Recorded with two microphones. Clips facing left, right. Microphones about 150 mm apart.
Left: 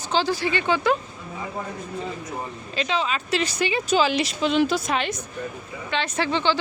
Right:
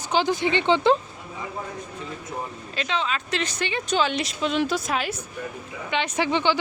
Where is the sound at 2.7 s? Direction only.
Centre (ahead or behind).